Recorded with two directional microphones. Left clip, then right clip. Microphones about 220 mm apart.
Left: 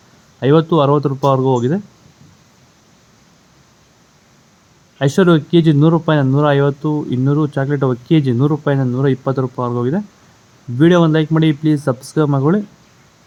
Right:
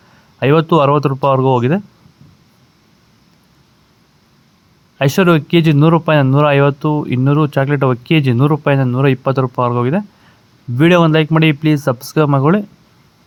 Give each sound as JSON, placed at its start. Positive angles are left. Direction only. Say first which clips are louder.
{"t": 0.3, "sound": "speech", "louder": "right 1 dB", "side_deg": -30}
{"t": 4.9, "sound": "speech", "louder": "right 1 dB", "side_deg": -30}